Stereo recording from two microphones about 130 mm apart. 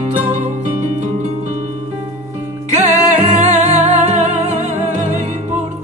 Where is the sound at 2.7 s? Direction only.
55° right (ahead or behind).